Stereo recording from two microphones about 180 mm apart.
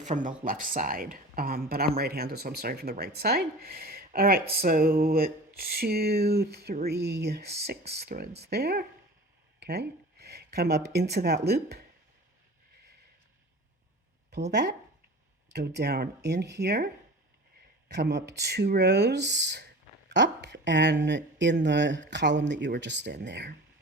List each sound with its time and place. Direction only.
0.0 s speech: 45° right (ahead or behind); by 11.8 s 60° right (ahead or behind)
14.5 s speech: 70° right (ahead or behind)